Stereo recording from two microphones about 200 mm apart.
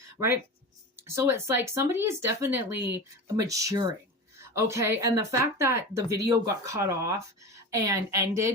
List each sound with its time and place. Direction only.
0.9 s speech: 15° right (ahead or behind)